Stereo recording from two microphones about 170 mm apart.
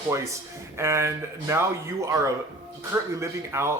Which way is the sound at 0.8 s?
15° right (ahead or behind).